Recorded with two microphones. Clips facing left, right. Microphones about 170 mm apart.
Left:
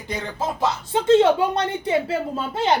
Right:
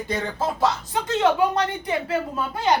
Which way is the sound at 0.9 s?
30° left (ahead or behind).